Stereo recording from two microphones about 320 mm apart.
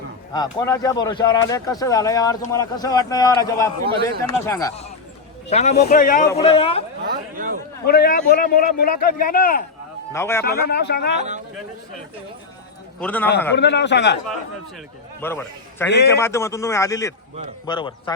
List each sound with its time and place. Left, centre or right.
0.3 s speech: centre
5.5 s speech: left
7.0 s a sound: right
7.9 s speech: left
10.1 s a man's voice: centre
10.7 s a man's voice: left
11.2 s speech: right
13.0 s a man's voice: centre
13.6 s a man's voice: left
15.2 s speech: centre